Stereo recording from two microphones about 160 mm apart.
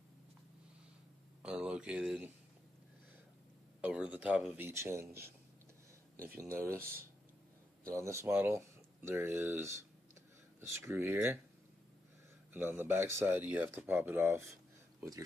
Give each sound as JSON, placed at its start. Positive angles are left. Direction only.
{"t": 1.4, "sound": "speech", "side_deg": -5}
{"t": 3.8, "sound": "speech", "side_deg": -10}
{"t": 4.6, "sound": "speech", "side_deg": -15}
{"t": 6.4, "sound": "speech", "side_deg": -15}
{"t": 12.5, "sound": "speech", "side_deg": -15}